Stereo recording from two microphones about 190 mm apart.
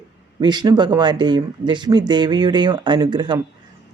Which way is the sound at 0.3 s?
20° right (ahead or behind).